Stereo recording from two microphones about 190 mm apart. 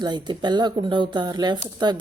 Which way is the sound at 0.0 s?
20° right (ahead or behind).